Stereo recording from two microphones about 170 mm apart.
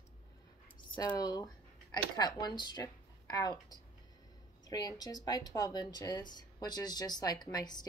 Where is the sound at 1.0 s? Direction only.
20° left (ahead or behind).